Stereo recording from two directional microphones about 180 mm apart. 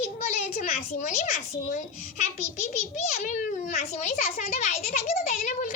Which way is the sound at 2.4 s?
40° left (ahead or behind).